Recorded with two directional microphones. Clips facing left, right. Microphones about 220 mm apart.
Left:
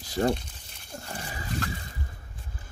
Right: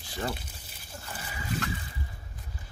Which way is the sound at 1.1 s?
40° left (ahead or behind).